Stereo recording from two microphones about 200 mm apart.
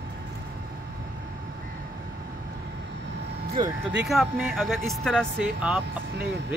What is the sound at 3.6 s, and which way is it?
Speech, 20° right (ahead or behind).